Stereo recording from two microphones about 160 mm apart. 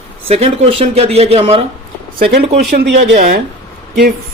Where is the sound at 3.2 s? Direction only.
60° right (ahead or behind).